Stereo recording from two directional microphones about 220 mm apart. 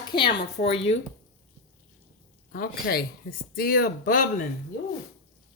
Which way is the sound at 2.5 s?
40° left (ahead or behind).